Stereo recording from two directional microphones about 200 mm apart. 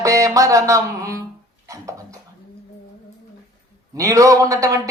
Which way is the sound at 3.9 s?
15° right (ahead or behind).